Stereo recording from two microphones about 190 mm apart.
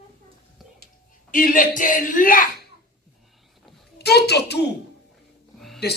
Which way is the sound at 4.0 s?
60° left (ahead or behind).